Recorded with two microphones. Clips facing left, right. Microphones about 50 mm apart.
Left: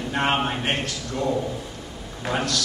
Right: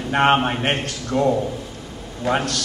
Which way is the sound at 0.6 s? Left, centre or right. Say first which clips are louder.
Right 3 dB; right.